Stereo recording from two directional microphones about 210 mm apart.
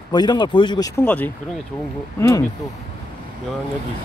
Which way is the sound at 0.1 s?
20° left (ahead or behind).